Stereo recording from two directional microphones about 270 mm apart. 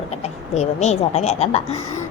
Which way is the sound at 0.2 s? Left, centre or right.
Left.